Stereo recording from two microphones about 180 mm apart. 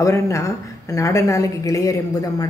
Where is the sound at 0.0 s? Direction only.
15° left (ahead or behind).